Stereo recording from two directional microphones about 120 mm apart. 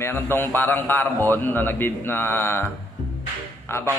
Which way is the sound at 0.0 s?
20° left (ahead or behind).